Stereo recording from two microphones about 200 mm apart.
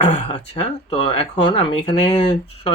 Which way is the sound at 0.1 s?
30° left (ahead or behind).